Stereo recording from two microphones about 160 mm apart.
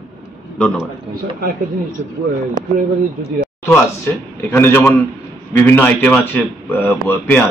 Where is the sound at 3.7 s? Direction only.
15° left (ahead or behind).